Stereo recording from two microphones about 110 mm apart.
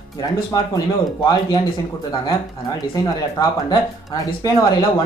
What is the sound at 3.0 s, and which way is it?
Speech, 35° left (ahead or behind).